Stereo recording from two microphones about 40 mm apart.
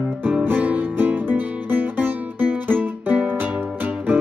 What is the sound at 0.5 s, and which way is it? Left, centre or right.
Music, right.